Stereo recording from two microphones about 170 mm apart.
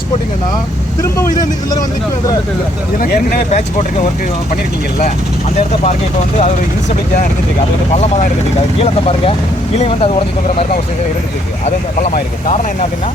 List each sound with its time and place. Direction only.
1.1 s speech: 20° left (ahead or behind)
3.0 s speech: 60° left (ahead or behind)
5.5 s speech: 40° left (ahead or behind)
8.8 s speech: 35° left (ahead or behind)